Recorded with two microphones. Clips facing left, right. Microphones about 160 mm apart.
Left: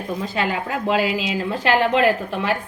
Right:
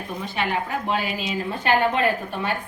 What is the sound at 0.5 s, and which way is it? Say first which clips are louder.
Speech: left 3 dB; 90° left.